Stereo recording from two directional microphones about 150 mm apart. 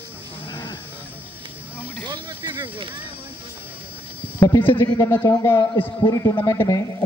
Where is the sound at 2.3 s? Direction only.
20° right (ahead or behind).